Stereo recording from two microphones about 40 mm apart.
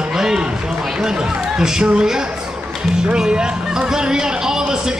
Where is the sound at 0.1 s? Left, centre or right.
Centre.